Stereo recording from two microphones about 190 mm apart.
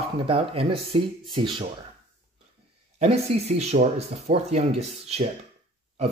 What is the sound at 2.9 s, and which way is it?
Speech, 35° right (ahead or behind).